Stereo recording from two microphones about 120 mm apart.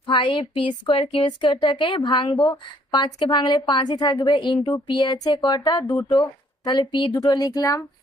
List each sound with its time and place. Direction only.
0.1 s a woman's voice: 40° left (ahead or behind)